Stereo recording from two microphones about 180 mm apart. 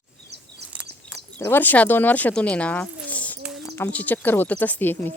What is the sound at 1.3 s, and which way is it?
Speech, 10° left (ahead or behind).